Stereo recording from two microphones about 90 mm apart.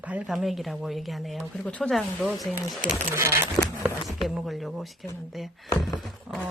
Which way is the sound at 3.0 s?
30° right (ahead or behind).